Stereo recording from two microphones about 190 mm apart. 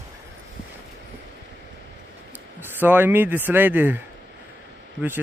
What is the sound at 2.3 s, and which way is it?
Speech, 10° right (ahead or behind).